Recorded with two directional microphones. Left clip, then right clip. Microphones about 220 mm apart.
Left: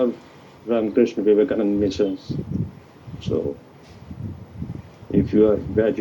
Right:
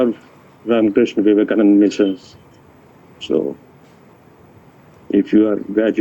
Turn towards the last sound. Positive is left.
turn(degrees=-70)  # may be behind; listen again after turning